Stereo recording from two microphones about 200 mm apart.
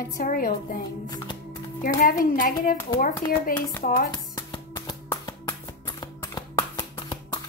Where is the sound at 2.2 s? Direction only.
45° left (ahead or behind).